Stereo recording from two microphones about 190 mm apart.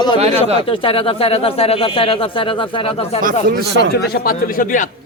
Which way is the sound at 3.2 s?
55° right (ahead or behind).